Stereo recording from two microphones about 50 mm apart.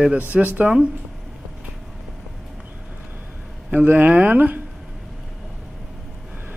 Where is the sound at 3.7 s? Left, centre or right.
Right.